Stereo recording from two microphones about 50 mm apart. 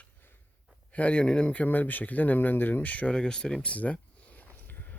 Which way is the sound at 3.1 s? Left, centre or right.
Centre.